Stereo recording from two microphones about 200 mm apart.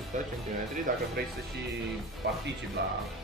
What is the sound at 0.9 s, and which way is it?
Speech, 40° right (ahead or behind).